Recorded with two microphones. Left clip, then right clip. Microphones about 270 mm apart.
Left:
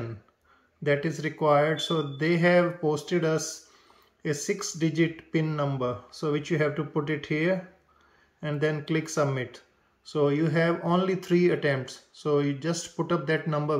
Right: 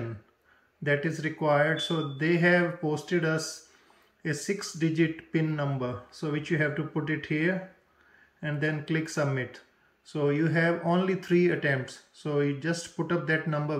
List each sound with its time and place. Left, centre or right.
0.8 s speech: centre
4.5 s speech: centre